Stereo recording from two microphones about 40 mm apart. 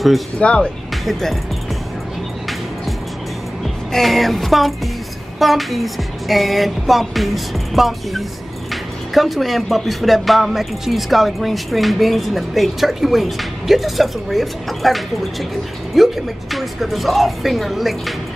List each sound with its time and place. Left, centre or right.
0.4 s speech: left
3.9 s speech: centre